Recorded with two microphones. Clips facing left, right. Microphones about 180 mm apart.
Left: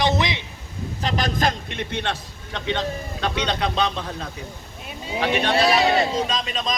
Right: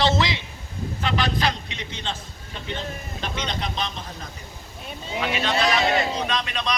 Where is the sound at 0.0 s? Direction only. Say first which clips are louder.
Even; 20° left (ahead or behind).